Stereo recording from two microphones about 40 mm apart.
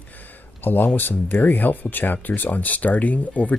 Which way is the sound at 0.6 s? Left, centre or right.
Left.